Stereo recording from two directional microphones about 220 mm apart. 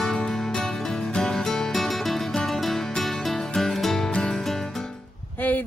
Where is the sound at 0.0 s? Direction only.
5° left (ahead or behind).